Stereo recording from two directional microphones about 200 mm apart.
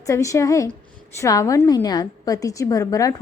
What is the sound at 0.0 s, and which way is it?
A woman's voice, 15° left (ahead or behind).